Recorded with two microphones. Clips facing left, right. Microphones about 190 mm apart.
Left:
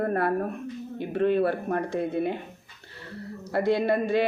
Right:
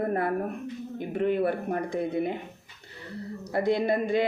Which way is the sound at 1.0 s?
15° right (ahead or behind).